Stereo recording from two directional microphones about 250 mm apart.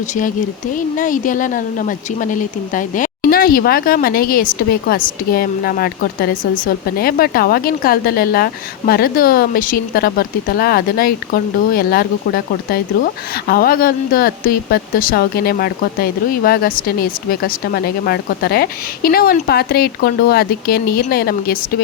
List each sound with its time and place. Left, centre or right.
0.1 s speech: left